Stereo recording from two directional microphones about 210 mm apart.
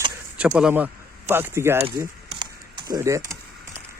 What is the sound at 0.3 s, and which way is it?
Speech, 5° right (ahead or behind).